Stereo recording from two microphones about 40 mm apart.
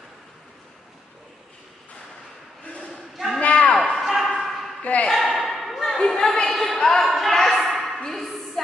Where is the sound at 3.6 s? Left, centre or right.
Centre.